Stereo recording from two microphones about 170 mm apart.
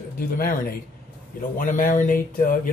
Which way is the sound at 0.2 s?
55° left (ahead or behind).